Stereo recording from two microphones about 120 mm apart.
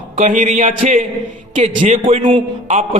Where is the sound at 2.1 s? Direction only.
50° right (ahead or behind).